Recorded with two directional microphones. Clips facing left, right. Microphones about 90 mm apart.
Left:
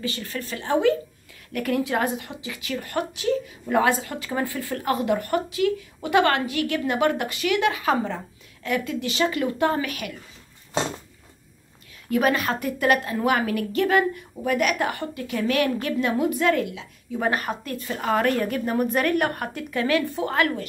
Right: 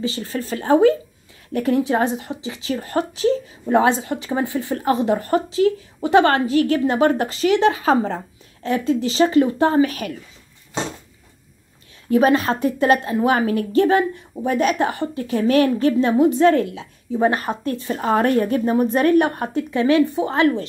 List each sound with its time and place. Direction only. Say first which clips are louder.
0.0 s a woman's voice: right 6 dB; 30° right (ahead or behind)
12.1 s a woman's voice: right 6 dB; 30° right (ahead or behind)